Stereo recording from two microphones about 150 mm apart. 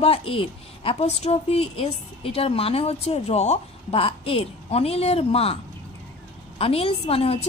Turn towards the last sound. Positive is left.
turn(degrees=40)  # may be behind; listen again after turning